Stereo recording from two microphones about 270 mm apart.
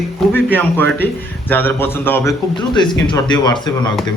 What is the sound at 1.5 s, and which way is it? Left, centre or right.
Speech, centre.